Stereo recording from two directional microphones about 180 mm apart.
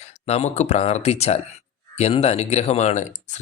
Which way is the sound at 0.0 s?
35° left (ahead or behind).